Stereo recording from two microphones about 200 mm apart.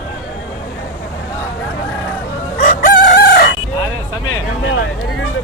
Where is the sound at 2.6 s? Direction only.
45° left (ahead or behind).